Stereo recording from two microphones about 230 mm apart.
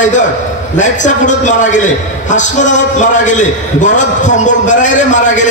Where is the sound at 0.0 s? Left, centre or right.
Left.